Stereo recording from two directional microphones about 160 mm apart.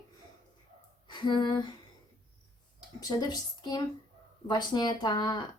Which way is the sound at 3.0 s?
25° left (ahead or behind).